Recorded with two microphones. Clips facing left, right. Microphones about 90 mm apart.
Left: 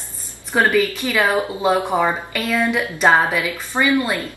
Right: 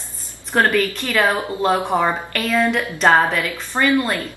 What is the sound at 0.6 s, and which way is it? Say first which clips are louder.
Speech: left 1 dB; 10° left (ahead or behind).